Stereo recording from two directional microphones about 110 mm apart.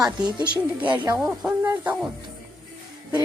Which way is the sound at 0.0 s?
45° right (ahead or behind).